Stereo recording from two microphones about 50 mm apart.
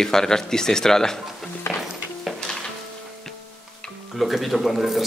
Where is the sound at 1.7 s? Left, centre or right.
Left.